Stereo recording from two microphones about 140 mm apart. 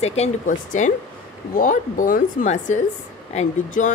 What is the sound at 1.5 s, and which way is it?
Speech, 75° left (ahead or behind).